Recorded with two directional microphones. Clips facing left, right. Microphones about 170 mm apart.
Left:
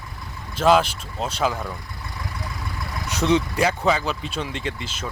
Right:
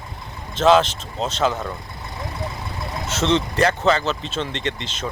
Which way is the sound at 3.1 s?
10° left (ahead or behind).